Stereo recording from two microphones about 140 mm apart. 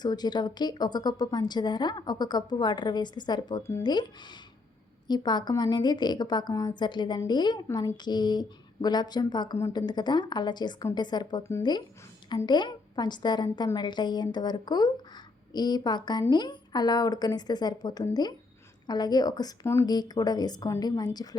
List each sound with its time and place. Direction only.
0.0 s a woman's voice: 30° left (ahead or behind)
3.8 s a woman's voice: 30° left (ahead or behind)